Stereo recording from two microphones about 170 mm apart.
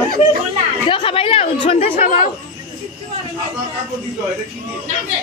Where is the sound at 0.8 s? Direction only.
30° left (ahead or behind).